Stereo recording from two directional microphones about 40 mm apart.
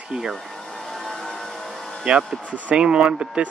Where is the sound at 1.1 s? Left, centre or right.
Centre.